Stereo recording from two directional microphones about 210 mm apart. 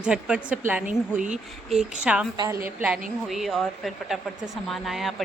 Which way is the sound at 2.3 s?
20° right (ahead or behind).